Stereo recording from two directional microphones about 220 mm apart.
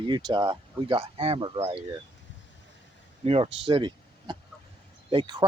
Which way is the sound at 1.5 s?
15° right (ahead or behind).